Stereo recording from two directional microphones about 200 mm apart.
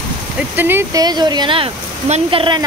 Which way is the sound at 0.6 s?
10° right (ahead or behind).